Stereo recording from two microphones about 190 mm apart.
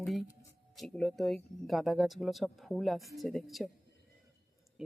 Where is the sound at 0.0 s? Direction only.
Centre (ahead or behind).